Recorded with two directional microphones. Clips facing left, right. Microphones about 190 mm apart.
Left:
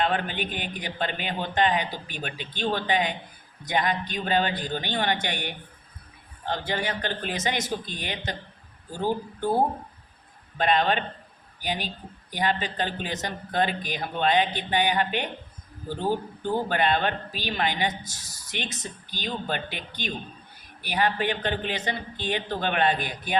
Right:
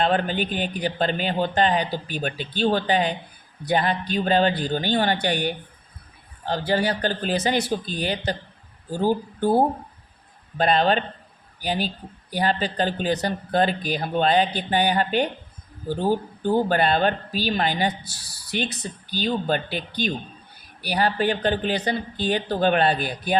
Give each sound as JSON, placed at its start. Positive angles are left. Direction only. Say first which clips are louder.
{"t": 0.0, "sound": "speech", "louder": "right 4 dB", "side_deg": -35}
{"t": 10.6, "sound": "speech", "louder": "right 3 dB", "side_deg": -35}
{"t": 16.6, "sound": "speech", "louder": "right 4 dB", "side_deg": -35}